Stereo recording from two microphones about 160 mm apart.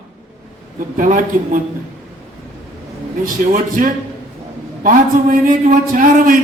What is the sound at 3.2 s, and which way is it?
A man's voice, 55° right (ahead or behind).